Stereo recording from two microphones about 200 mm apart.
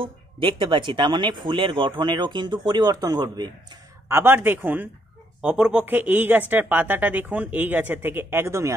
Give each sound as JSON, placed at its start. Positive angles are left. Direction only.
{"t": 0.0, "sound": "speech", "side_deg": -25}